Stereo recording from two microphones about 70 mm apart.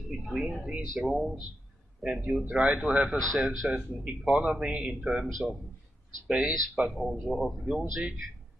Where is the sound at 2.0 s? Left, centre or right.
Centre.